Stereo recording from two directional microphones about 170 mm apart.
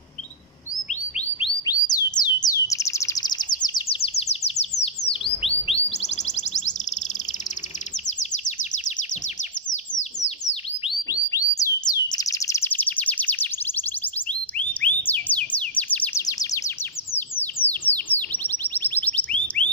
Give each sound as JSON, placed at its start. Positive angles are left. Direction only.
{"t": 1.7, "sound": "bird", "side_deg": 20}
{"t": 5.2, "sound": "chirp", "side_deg": 35}
{"t": 6.0, "sound": "music", "side_deg": 45}
{"t": 11.2, "sound": "bird", "side_deg": 20}
{"t": 17.1, "sound": "bird", "side_deg": 10}